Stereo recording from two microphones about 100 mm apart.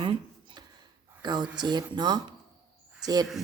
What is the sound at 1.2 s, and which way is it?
Speech, 45° right (ahead or behind).